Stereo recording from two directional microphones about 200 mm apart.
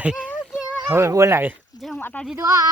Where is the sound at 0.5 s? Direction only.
5° right (ahead or behind).